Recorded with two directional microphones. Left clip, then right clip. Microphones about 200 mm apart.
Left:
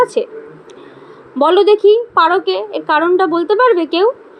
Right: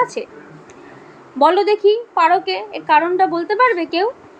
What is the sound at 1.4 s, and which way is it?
A woman's voice, 20° left (ahead or behind).